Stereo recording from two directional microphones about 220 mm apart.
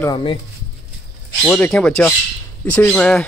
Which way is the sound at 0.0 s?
20° left (ahead or behind).